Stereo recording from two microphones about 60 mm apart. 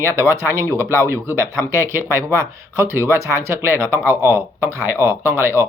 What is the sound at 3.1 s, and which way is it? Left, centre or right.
Speech, right.